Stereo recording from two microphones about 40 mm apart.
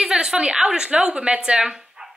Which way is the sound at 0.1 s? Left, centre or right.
Centre.